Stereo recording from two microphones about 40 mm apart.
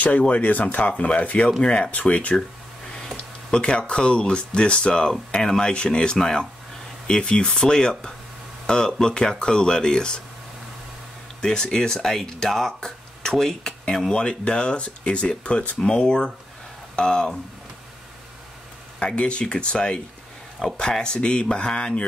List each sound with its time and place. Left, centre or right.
0.3 s speech: left
1.9 s speech: left
3.5 s speech: left
11.4 s speech: centre
19.1 s speech: left
20.6 s speech: centre